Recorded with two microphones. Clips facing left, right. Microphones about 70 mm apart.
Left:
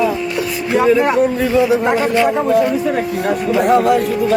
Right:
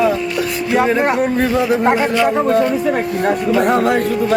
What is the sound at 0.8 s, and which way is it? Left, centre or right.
Speech, right.